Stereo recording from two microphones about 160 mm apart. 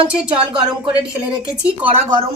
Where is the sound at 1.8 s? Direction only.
35° right (ahead or behind).